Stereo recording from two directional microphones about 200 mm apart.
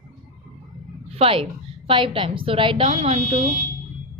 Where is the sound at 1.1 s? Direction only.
30° right (ahead or behind).